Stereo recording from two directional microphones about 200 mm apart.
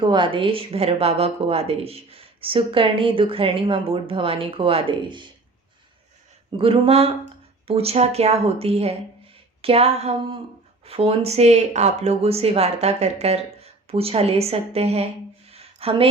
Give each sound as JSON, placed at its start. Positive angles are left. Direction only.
{"t": 0.0, "sound": "speech", "side_deg": -25}
{"t": 6.6, "sound": "speech", "side_deg": -30}
{"t": 15.4, "sound": "a sound", "side_deg": -30}